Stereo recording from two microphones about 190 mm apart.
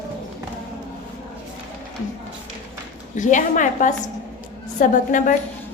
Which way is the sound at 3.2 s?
40° left (ahead or behind).